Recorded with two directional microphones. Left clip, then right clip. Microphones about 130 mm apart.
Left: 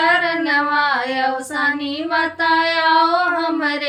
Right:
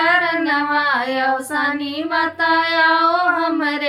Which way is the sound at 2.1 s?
15° left (ahead or behind).